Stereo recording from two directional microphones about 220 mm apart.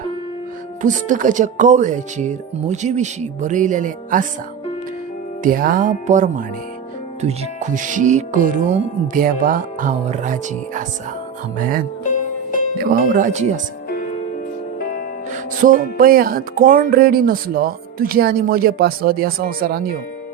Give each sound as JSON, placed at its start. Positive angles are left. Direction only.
{"t": 0.8, "sound": "speech", "side_deg": -35}
{"t": 5.4, "sound": "speech", "side_deg": -40}
{"t": 12.0, "sound": "music", "side_deg": 35}
{"t": 12.7, "sound": "speech", "side_deg": -40}
{"t": 13.9, "sound": "music", "side_deg": 40}
{"t": 15.6, "sound": "speech", "side_deg": -40}